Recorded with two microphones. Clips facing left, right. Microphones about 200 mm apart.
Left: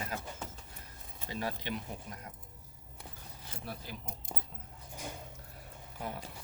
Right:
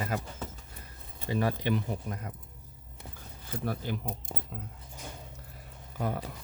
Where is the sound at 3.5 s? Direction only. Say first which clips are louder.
Right 11 dB; 65° right (ahead or behind).